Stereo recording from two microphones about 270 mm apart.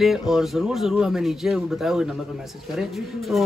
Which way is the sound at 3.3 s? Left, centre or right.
Centre.